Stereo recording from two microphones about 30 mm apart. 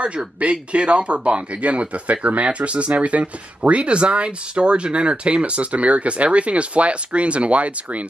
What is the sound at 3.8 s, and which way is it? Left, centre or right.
Speech, right.